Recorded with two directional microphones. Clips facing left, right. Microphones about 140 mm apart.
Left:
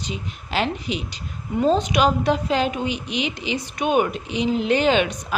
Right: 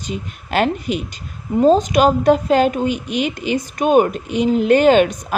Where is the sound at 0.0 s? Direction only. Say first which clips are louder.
Right 4 dB; 50° right (ahead or behind).